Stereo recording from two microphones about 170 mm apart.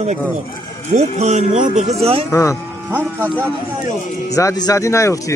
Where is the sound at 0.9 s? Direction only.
40° right (ahead or behind).